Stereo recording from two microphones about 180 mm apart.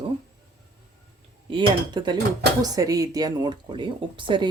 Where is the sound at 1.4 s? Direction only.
25° right (ahead or behind).